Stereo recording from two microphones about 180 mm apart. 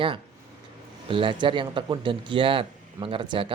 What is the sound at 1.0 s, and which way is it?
Speech, 30° right (ahead or behind).